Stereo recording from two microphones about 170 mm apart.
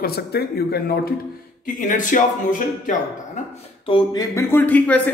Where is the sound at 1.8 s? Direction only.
50° left (ahead or behind).